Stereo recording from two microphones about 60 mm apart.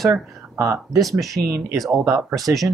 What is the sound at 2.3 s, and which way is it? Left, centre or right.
Speech, centre.